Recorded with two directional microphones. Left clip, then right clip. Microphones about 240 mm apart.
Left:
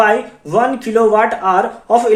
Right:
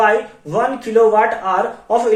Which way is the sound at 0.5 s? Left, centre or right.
Left.